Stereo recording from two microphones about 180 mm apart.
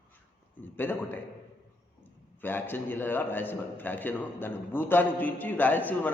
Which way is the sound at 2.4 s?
10° left (ahead or behind).